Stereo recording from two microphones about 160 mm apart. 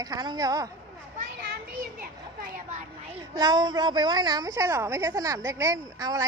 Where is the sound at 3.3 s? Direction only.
25° right (ahead or behind).